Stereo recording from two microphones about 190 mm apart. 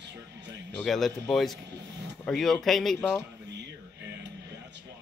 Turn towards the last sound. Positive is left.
turn(degrees=0)  # may be behind; listen again after turning